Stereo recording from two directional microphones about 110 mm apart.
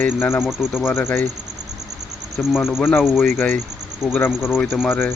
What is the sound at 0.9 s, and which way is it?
Speech, 20° left (ahead or behind).